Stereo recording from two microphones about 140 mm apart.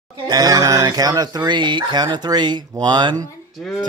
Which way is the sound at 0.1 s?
30° right (ahead or behind).